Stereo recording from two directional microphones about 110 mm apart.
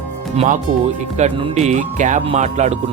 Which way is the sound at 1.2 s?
90° right.